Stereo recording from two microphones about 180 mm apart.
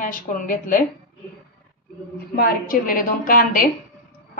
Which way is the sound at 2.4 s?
55° left (ahead or behind).